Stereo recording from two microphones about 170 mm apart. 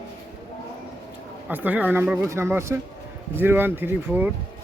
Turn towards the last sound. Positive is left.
turn(degrees=-10)  # may be behind; listen again after turning